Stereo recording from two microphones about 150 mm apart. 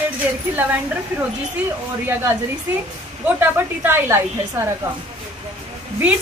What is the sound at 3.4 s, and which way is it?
Speech, 15° right (ahead or behind).